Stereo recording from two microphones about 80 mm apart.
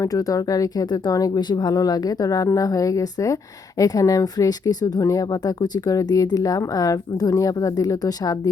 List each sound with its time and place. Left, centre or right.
0.0 s speech: left